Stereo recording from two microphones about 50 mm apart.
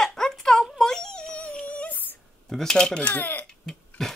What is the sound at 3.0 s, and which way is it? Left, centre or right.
Speech, left.